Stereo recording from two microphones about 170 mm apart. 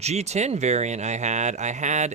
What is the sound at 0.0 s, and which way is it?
Speech, 40° right (ahead or behind).